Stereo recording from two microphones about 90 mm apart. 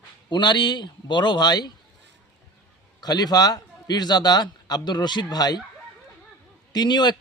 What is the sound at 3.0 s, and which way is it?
A man's voice, 50° left (ahead or behind).